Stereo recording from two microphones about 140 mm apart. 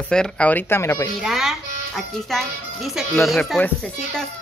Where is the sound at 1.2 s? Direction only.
Centre (ahead or behind).